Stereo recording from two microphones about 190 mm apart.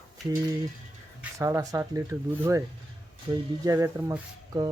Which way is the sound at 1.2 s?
15° right (ahead or behind).